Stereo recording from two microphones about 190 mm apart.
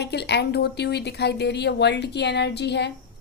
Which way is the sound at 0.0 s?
60° left (ahead or behind).